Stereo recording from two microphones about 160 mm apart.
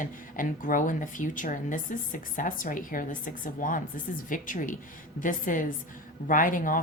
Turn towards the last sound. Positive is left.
turn(degrees=60)  # may be behind; listen again after turning